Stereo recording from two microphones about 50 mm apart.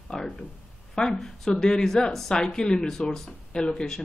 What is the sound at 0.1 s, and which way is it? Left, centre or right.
Speech, centre.